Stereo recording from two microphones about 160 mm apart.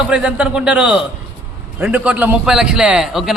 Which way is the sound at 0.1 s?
5° right (ahead or behind).